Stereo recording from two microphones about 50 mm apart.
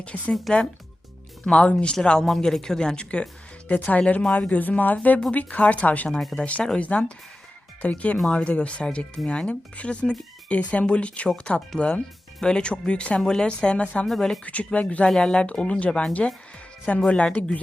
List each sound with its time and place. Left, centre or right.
0.0 s speech: left
1.5 s speech: left
6.1 s speech: centre
6.4 s speech: left
14.4 s speech: left
15.0 s speech: centre